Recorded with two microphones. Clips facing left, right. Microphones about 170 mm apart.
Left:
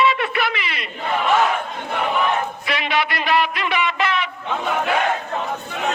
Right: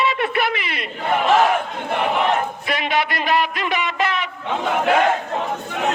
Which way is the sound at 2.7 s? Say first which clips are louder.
Right 1 dB; 50° right (ahead or behind).